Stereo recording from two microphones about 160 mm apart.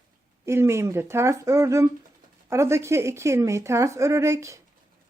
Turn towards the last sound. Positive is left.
turn(degrees=-15)  # may be behind; listen again after turning